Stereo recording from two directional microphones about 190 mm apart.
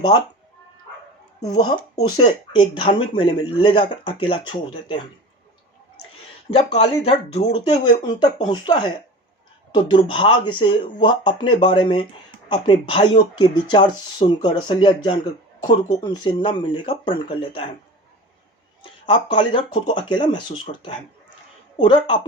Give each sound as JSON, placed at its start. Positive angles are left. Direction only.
{"t": 1.4, "sound": "speech", "side_deg": 25}
{"t": 6.5, "sound": "speech", "side_deg": 35}
{"t": 18.8, "sound": "speech", "side_deg": 25}